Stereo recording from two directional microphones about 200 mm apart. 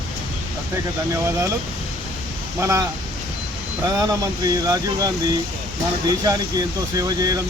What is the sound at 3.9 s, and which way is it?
Speech, 20° right (ahead or behind).